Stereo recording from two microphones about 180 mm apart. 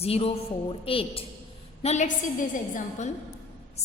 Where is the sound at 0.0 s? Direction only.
35° left (ahead or behind).